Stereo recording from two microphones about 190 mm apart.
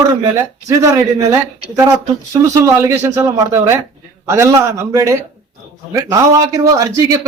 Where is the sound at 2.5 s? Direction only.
15° right (ahead or behind).